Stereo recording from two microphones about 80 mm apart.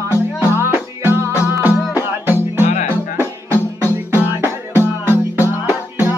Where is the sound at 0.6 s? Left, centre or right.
Right.